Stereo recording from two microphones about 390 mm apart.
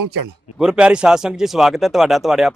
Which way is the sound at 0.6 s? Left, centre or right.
Centre.